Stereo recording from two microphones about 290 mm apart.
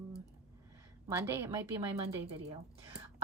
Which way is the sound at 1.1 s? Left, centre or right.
Centre.